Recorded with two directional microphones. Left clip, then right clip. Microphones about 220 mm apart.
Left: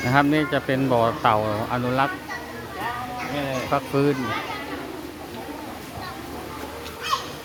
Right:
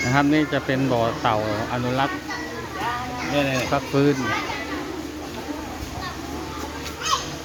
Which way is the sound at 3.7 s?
5° left (ahead or behind).